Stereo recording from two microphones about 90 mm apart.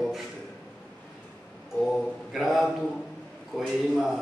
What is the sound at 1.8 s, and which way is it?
Mantra, centre (ahead or behind).